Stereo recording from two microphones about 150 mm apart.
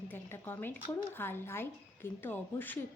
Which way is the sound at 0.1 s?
15° left (ahead or behind).